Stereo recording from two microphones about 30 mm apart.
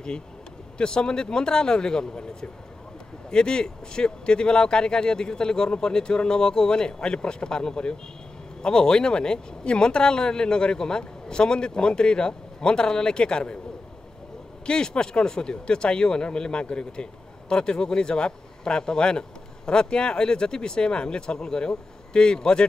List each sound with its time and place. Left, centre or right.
0.7 s speech: left
3.3 s speech: left
14.7 s speech: left